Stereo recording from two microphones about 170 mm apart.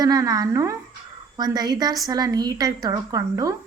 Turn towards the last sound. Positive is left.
turn(degrees=-20)  # may be behind; listen again after turning